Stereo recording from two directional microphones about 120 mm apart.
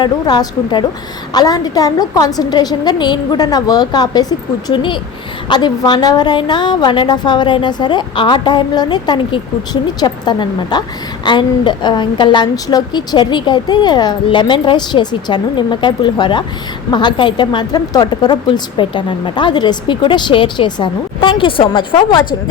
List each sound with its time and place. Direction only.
0.0 s a woman's voice: 40° left (ahead or behind)